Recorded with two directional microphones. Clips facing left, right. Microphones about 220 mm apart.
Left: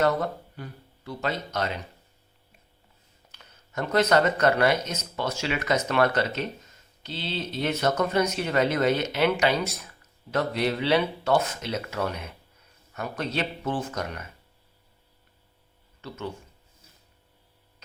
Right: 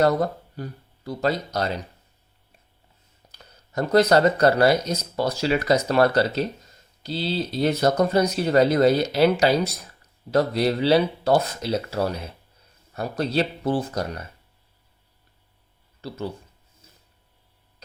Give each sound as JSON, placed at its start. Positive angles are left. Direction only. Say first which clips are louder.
{"t": 0.0, "sound": "speech", "louder": "right 4 dB", "side_deg": -35}
{"t": 3.3, "sound": "speech", "louder": "right 5 dB", "side_deg": -35}
{"t": 16.0, "sound": "speech", "louder": "right 4 dB", "side_deg": -35}